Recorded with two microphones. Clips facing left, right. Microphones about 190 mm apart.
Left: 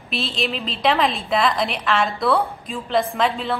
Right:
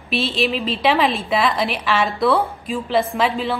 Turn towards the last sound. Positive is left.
turn(degrees=0)  # may be behind; listen again after turning